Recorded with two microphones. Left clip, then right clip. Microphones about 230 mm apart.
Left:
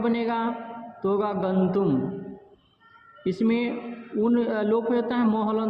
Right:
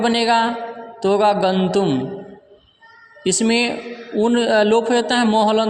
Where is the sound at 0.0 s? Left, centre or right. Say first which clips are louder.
Right 10 dB; right.